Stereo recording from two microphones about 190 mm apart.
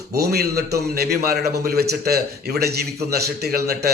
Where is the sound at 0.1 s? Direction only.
55° right (ahead or behind).